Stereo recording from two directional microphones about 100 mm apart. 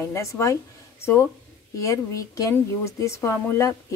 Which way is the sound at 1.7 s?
30° left (ahead or behind).